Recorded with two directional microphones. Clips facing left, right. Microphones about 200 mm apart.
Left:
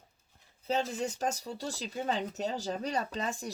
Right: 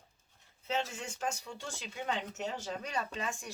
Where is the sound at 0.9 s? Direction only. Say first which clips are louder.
Left 6 dB; 35° left (ahead or behind).